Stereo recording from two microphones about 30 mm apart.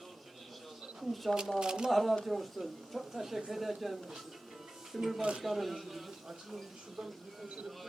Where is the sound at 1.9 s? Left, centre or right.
Centre.